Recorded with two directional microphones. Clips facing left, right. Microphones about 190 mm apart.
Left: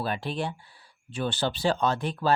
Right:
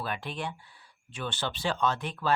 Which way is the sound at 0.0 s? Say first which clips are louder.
Left 5 dB; 35° left (ahead or behind).